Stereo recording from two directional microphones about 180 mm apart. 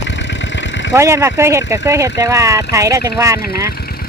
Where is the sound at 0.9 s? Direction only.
15° right (ahead or behind).